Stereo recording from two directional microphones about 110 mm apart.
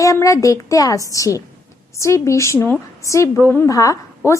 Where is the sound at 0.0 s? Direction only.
30° left (ahead or behind).